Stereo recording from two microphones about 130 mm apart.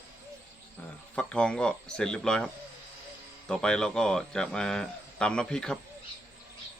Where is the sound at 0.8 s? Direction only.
10° left (ahead or behind).